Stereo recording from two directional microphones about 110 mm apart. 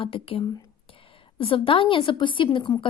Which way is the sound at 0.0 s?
55° left (ahead or behind).